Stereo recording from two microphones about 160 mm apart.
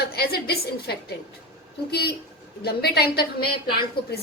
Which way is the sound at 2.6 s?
90° left.